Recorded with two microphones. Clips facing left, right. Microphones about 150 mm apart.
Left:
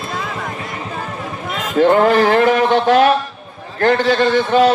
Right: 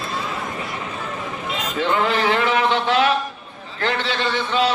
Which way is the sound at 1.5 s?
45° left (ahead or behind).